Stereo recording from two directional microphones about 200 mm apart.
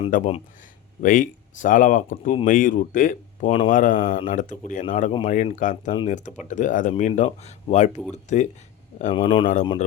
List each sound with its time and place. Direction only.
0.1 s speech: 40° left (ahead or behind)
9.1 s speech: 25° left (ahead or behind)